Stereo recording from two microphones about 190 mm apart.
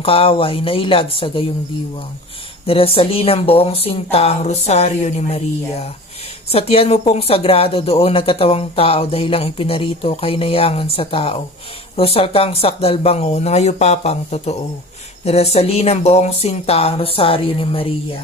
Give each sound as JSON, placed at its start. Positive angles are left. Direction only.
{"t": 0.0, "sound": "speech", "side_deg": 30}
{"t": 2.6, "sound": "speech", "side_deg": 30}